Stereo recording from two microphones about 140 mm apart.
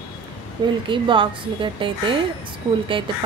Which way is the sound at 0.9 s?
35° right (ahead or behind).